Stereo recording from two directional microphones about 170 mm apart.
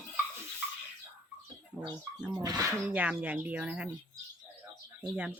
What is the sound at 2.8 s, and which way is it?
Speech, 10° right (ahead or behind).